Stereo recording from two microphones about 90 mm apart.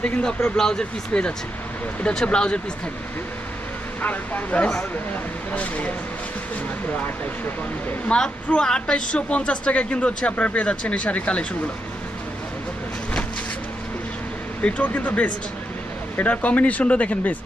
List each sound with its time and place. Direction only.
0.0 s speech: 10° left (ahead or behind)
4.0 s speech: 15° left (ahead or behind)
8.1 s speech: 10° left (ahead or behind)
14.6 s speech: 15° left (ahead or behind)